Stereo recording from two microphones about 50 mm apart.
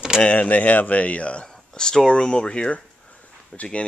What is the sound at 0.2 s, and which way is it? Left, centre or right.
Speech, left.